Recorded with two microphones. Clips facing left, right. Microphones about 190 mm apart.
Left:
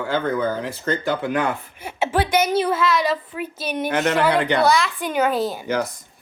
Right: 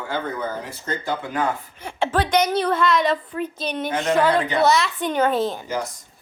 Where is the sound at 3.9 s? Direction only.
70° left (ahead or behind).